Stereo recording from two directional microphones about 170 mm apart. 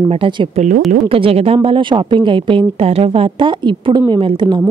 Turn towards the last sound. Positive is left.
turn(degrees=-30)  # may be behind; listen again after turning